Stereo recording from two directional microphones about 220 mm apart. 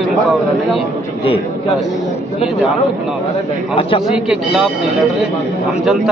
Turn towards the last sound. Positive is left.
turn(degrees=0)  # may be behind; listen again after turning